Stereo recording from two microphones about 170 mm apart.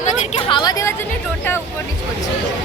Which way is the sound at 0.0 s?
45° left (ahead or behind).